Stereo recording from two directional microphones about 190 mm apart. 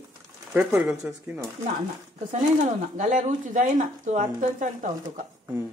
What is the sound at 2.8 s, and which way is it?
A woman's voice, 45° right (ahead or behind).